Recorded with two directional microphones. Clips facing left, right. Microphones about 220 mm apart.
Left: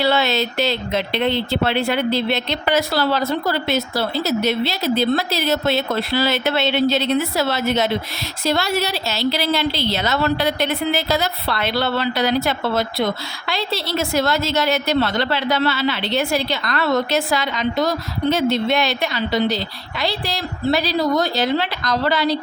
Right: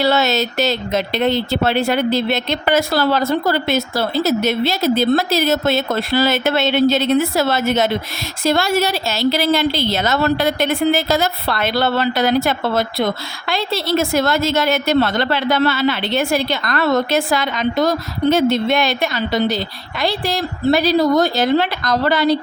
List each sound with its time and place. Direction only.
0.0 s a woman's voice: 45° right (ahead or behind)